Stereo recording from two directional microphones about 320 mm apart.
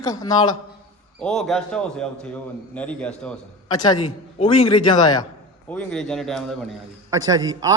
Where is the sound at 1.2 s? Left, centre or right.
Centre.